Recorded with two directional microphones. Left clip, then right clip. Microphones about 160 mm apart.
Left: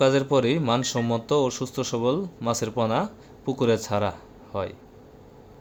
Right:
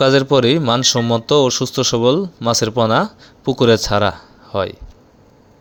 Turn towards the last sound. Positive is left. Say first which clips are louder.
# right 10 dB
turn(degrees=-30)  # may be behind; listen again after turning